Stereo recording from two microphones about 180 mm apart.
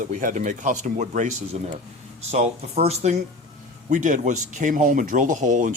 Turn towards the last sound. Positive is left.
turn(degrees=-45)  # may be behind; listen again after turning